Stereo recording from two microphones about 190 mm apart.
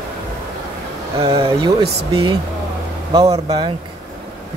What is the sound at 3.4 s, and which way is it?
Speech, 20° right (ahead or behind).